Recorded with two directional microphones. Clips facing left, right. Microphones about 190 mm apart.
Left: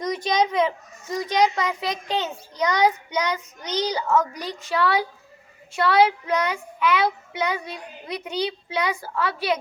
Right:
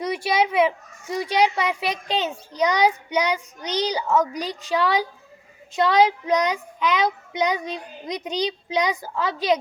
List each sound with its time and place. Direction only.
0.0 s child singing: 10° right (ahead or behind)